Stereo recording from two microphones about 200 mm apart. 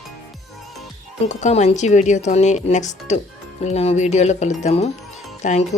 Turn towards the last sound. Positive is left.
turn(degrees=35)  # may be behind; listen again after turning